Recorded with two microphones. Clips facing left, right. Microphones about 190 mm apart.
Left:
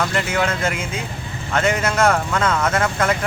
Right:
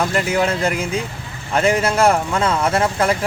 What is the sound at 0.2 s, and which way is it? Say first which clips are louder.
Speech: right 3 dB; 35° right (ahead or behind).